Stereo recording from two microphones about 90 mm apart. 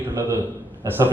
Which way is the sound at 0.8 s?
25° right (ahead or behind).